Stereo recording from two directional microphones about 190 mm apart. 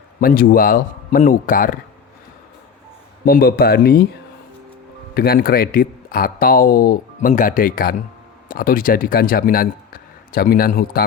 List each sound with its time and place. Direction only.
0.2 s speech: 50° left (ahead or behind)
3.2 s speech: 50° left (ahead or behind)
5.1 s speech: 55° left (ahead or behind)